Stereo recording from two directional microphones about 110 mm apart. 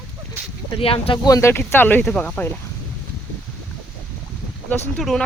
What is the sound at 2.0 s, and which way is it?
Speech, 5° left (ahead or behind).